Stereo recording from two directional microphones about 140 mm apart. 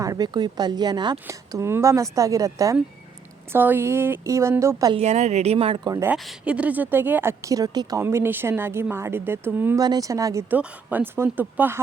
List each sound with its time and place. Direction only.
0.0 s a woman's voice: 25° right (ahead or behind)
4.9 s a woman's voice: 55° right (ahead or behind)
5.9 s a woman's voice: 20° right (ahead or behind)
9.8 s speech: 25° right (ahead or behind)
10.5 s a woman's voice: 10° right (ahead or behind)